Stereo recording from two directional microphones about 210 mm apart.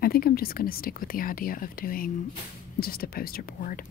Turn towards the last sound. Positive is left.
turn(degrees=40)  # may be behind; listen again after turning